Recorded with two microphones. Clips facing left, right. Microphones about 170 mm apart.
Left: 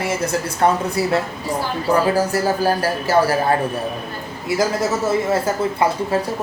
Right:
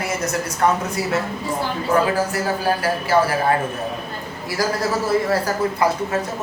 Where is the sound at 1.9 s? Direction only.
40° left (ahead or behind).